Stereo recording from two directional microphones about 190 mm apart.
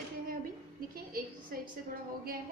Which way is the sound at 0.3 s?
50° right (ahead or behind).